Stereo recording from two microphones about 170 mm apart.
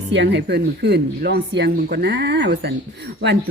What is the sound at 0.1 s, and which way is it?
Speech, 90° right.